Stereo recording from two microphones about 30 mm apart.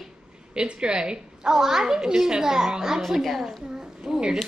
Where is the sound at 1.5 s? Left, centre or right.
Centre.